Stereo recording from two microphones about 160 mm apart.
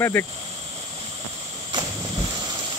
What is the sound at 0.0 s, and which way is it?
Speech, 15° left (ahead or behind).